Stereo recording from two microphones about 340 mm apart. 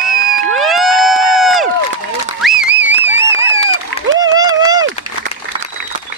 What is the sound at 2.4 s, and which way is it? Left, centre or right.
Music, centre.